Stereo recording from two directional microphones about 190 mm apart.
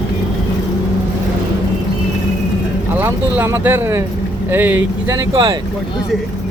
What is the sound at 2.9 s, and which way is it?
Speech, 10° right (ahead or behind).